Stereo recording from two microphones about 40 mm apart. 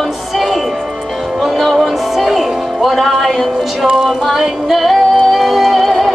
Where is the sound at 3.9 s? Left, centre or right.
Centre.